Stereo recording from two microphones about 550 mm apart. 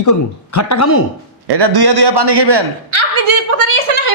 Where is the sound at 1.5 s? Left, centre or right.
Right.